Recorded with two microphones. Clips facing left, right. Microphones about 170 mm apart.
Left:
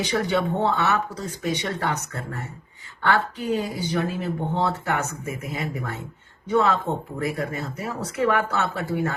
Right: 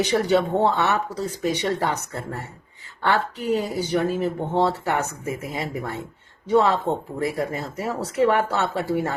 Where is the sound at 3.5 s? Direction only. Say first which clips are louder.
Right 4 dB; 40° right (ahead or behind).